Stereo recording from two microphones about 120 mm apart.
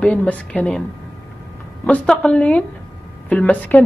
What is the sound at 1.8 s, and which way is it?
Speech, 10° left (ahead or behind).